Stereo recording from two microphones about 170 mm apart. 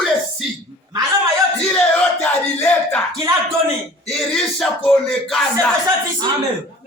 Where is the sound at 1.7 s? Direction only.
10° left (ahead or behind).